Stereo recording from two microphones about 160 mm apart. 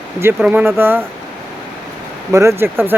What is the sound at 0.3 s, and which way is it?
Speech, 5° right (ahead or behind).